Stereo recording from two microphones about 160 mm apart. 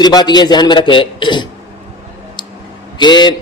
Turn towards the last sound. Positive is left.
turn(degrees=30)  # may be behind; listen again after turning